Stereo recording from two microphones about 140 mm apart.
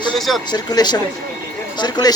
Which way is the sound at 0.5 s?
30° left (ahead or behind).